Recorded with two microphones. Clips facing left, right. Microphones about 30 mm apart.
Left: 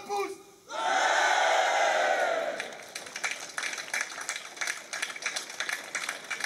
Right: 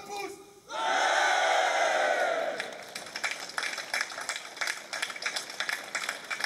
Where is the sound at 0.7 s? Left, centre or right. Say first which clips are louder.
Left 1 dB; centre.